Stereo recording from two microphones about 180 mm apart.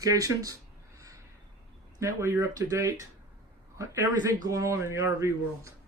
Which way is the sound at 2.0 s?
15° right (ahead or behind).